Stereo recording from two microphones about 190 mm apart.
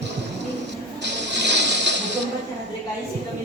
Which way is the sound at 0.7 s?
65° right (ahead or behind).